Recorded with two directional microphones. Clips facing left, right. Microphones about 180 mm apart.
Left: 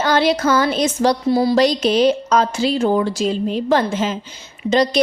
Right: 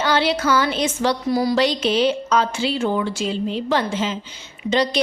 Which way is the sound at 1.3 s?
25° left (ahead or behind).